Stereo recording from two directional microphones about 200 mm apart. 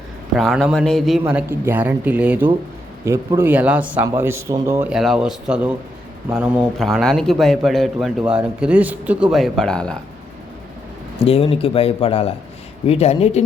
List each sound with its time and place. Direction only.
0.3 s a man's voice: centre (ahead or behind)
11.2 s speech: 30° left (ahead or behind)